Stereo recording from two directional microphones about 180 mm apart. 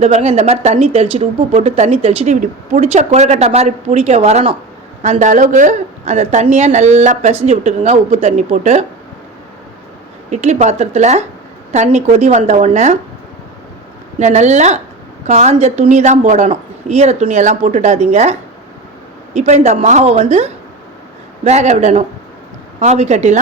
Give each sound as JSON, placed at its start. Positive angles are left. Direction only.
{"t": 0.0, "sound": "speech", "side_deg": -35}
{"t": 10.2, "sound": "speech", "side_deg": -40}
{"t": 14.2, "sound": "speech", "side_deg": -40}